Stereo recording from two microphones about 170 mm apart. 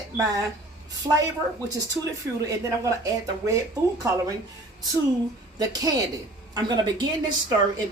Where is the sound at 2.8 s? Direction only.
20° right (ahead or behind).